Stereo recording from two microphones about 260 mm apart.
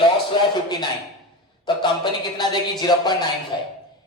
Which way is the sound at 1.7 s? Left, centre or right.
Centre.